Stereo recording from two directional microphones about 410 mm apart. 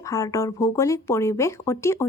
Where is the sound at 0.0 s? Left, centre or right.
Centre.